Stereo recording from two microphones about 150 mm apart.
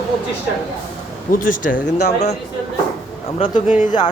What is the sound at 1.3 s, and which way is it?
Speech, 65° left (ahead or behind).